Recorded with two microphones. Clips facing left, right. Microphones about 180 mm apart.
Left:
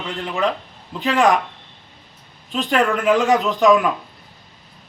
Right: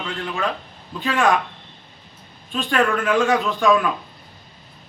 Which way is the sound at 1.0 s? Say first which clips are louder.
Left 3 dB; 20° left (ahead or behind).